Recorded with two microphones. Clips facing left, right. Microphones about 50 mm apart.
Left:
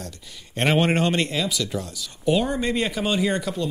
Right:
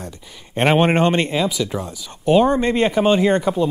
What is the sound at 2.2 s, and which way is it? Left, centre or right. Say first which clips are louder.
Speech: right 7 dB; right.